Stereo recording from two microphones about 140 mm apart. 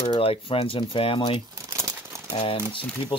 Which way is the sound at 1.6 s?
20° right (ahead or behind).